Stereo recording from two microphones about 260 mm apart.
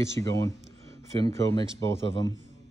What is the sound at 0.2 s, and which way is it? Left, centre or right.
Speech, centre.